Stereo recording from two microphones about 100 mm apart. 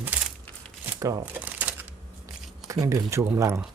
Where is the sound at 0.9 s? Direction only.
35° right (ahead or behind).